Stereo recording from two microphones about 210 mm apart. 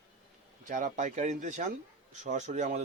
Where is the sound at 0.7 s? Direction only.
35° right (ahead or behind).